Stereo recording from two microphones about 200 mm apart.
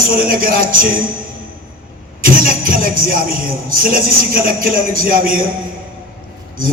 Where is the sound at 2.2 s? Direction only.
45° right (ahead or behind).